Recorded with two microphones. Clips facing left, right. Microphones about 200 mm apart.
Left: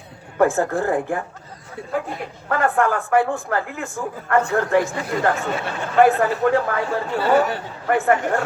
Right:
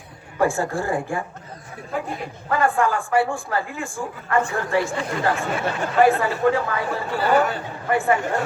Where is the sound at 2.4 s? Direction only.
60° left (ahead or behind).